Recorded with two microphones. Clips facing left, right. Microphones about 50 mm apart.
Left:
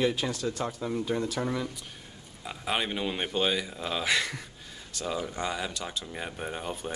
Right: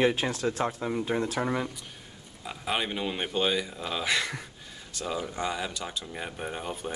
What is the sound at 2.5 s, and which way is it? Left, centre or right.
Speech, centre.